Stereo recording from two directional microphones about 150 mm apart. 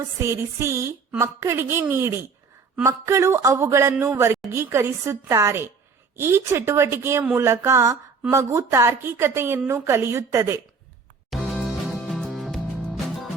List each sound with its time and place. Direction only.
0.2 s a woman's voice: 20° right (ahead or behind)
11.3 s music: centre (ahead or behind)